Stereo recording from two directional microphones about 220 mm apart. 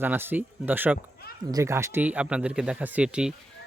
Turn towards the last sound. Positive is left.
turn(degrees=-5)  # may be behind; listen again after turning